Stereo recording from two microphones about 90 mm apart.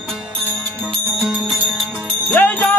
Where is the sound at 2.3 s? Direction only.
15° left (ahead or behind).